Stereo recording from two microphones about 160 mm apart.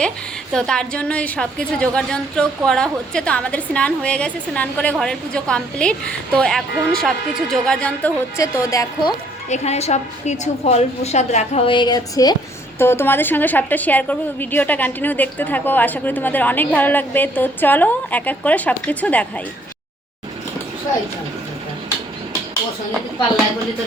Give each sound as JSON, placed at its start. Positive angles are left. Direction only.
{"t": 0.5, "sound": "a woman's voice", "side_deg": 5}
{"t": 8.4, "sound": "a woman's voice", "side_deg": 20}
{"t": 9.5, "sound": "a woman's voice", "side_deg": 40}
{"t": 12.8, "sound": "a woman's voice", "side_deg": 15}